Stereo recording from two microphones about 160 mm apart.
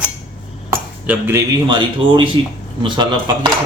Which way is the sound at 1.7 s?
30° right (ahead or behind).